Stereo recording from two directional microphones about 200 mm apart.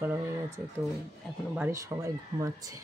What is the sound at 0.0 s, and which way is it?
Speech, 10° right (ahead or behind).